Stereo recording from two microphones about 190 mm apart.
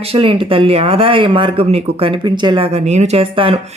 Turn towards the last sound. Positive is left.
turn(degrees=-30)  # may be behind; listen again after turning